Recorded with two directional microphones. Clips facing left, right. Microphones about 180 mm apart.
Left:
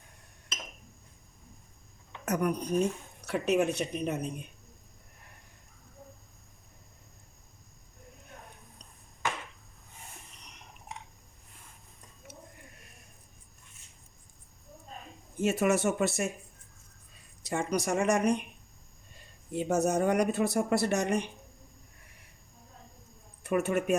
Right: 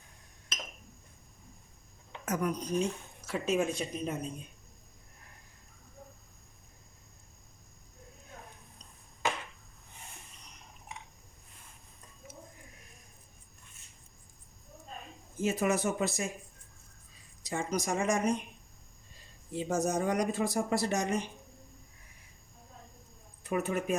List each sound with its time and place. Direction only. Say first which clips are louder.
2.2 s speech: left 3 dB; 65° left (ahead or behind)
15.4 s speech: left 3 dB; 70° left (ahead or behind)
17.4 s speech: left 3 dB; 65° left (ahead or behind)
19.5 s speech: left 3 dB; 60° left (ahead or behind)
23.4 s speech: left 4 dB; 70° left (ahead or behind)